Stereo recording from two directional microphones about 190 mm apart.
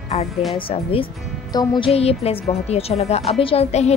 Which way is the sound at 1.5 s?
25° left (ahead or behind).